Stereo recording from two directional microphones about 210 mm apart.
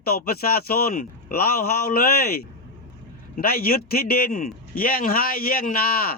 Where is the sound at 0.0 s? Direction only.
45° left (ahead or behind).